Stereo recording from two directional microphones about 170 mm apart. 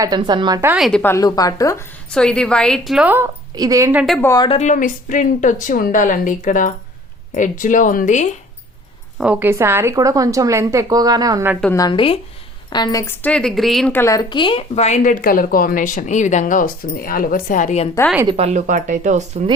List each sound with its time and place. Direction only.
0.0 s a woman's voice: 25° right (ahead or behind)
0.8 s a woman's voice: 5° left (ahead or behind)
1.1 s a woman's voice: 20° left (ahead or behind)
2.0 s a woman's voice: 5° left (ahead or behind)
3.5 s a woman's voice: 20° right (ahead or behind)
4.2 s a woman's voice: 20° left (ahead or behind)
4.4 s speech: 40° left (ahead or behind)
9.1 s a woman's voice: 5° right (ahead or behind)
11.7 s a woman's voice: 25° left (ahead or behind)
13.2 s a woman's voice: 5° left (ahead or behind)
13.9 s speech: 15° left (ahead or behind); by 17.8 s 45° left (ahead or behind)
18.3 s speech: 40° right (ahead or behind)